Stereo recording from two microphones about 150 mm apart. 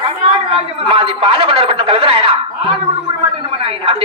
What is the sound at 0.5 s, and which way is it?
Speech, 40° right (ahead or behind).